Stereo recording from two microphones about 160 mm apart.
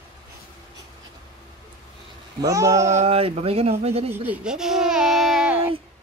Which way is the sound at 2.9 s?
40° right (ahead or behind).